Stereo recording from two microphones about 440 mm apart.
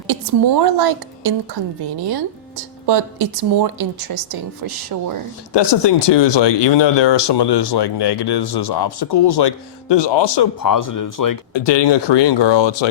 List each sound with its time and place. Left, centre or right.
0.1 s a woman's voice: right
2.0 s a woman's voice: right
5.5 s speech: left
11.5 s speech: left